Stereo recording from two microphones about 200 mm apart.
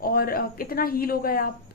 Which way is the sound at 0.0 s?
50° left (ahead or behind).